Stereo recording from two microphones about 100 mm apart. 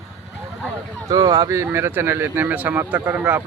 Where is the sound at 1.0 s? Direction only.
40° right (ahead or behind).